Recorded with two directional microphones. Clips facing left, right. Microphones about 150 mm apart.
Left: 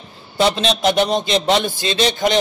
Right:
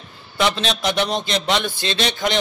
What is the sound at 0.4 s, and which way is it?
Speech, 35° left (ahead or behind).